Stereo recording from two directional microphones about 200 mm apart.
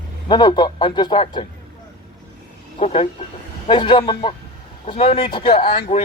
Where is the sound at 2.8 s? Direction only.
30° left (ahead or behind).